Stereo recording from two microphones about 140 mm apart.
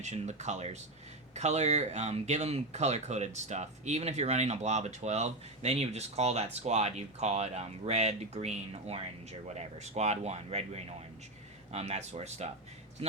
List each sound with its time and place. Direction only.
0.0 s speech: 55° right (ahead or behind)